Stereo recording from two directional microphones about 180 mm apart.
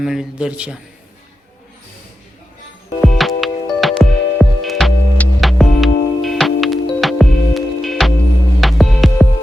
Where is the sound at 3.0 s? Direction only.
Centre (ahead or behind).